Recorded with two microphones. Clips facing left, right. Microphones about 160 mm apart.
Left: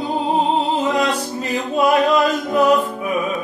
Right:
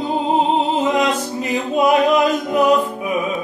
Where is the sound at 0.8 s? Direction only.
20° right (ahead or behind).